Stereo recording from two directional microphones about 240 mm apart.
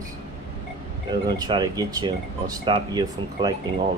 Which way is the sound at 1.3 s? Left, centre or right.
Centre.